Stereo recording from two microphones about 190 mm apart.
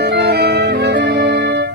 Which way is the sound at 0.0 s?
55° right (ahead or behind).